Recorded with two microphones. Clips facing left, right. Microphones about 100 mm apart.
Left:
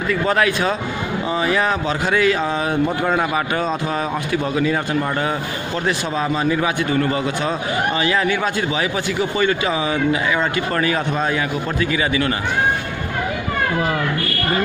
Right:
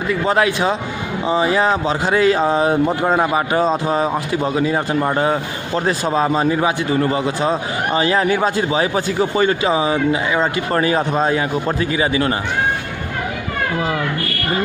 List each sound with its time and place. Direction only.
0.1 s a man's voice: 25° right (ahead or behind)